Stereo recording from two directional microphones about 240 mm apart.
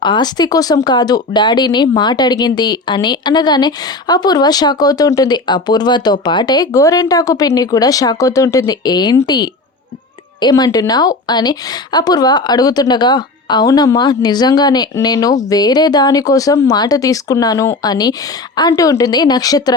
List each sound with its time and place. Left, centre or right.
0.0 s speech: centre